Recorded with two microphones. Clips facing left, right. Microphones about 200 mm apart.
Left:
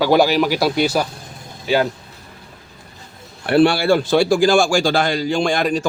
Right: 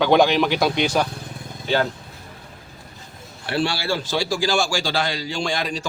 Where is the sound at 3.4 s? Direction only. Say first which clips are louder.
Left 10 dB; 55° left (ahead or behind).